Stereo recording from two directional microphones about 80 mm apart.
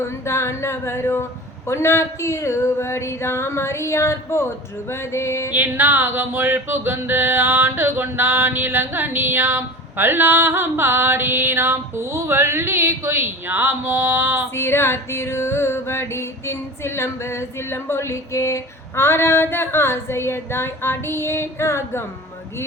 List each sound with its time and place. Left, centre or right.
0.0 s music: left
5.5 s a sound: right
14.5 s music: left